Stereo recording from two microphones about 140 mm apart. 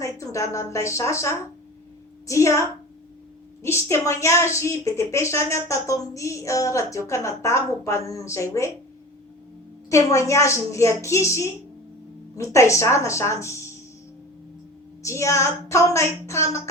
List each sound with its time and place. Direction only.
0.0 s a woman's voice: 20° left (ahead or behind)
9.9 s a woman's voice: 20° left (ahead or behind)
15.0 s a woman's voice: 20° left (ahead or behind)